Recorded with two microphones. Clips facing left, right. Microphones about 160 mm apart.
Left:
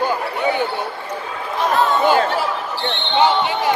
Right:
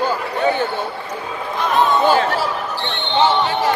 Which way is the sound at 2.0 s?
15° left (ahead or behind).